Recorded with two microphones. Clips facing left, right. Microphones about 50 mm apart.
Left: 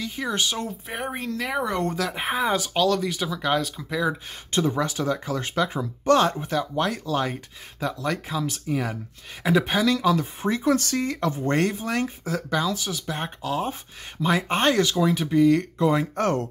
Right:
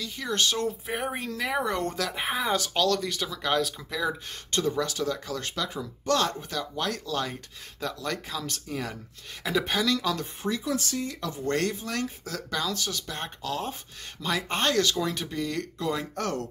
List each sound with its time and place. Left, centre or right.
0.0 s speech: left
10.4 s speech: left
11.4 s speech: left